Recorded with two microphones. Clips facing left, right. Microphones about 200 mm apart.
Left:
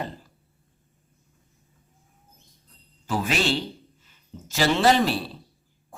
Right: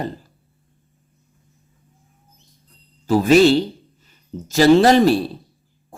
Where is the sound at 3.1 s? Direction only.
40° right (ahead or behind).